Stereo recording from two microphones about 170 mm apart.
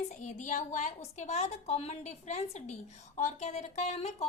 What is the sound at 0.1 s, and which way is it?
A woman's voice, 45° left (ahead or behind).